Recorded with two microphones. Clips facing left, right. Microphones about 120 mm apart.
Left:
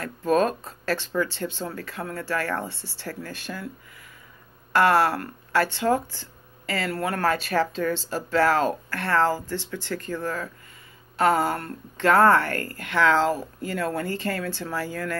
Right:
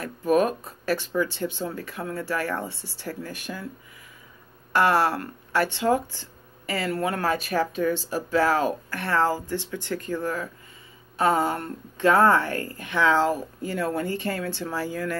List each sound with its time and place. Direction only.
0.0 s a sound: 15° right (ahead or behind)
1.1 s speech: 15° right (ahead or behind)
4.7 s speech: 20° right (ahead or behind)
12.1 s speech: 20° right (ahead or behind)